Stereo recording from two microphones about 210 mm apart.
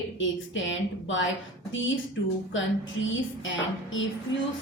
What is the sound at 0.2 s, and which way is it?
A woman's voice, 65° left (ahead or behind).